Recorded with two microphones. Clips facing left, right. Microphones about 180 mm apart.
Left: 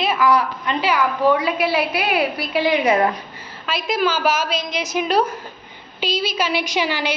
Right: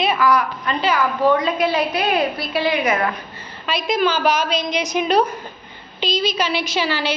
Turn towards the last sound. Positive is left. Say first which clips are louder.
# even
turn(degrees=15)  # may be behind; listen again after turning